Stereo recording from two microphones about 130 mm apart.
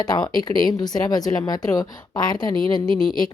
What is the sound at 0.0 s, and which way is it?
Speech, 30° left (ahead or behind).